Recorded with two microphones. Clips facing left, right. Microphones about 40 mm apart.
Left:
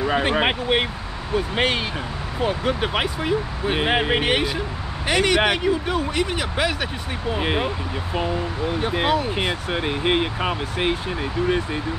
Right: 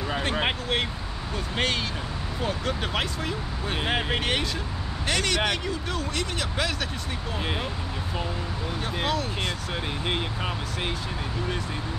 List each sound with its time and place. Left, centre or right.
0.0 s speech: left